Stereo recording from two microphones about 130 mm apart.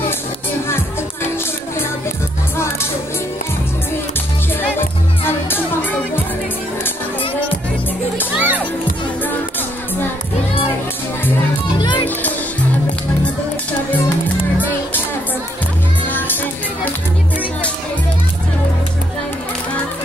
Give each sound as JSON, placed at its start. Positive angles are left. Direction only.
{"t": 2.5, "sound": "music", "side_deg": 20}
{"t": 4.6, "sound": "music", "side_deg": 15}
{"t": 8.4, "sound": "children playing", "side_deg": -10}